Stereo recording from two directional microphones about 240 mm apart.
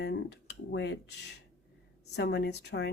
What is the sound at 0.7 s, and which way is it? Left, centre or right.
Speech, left.